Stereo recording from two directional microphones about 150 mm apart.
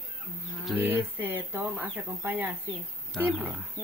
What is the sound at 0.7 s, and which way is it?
Speech, 10° right (ahead or behind).